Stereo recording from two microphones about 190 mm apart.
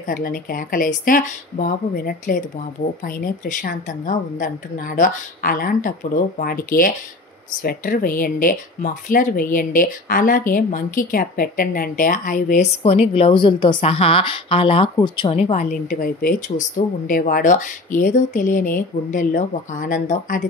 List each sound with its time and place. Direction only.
0.0 s speech: 45° left (ahead or behind)
12.8 s a woman's voice: 30° left (ahead or behind)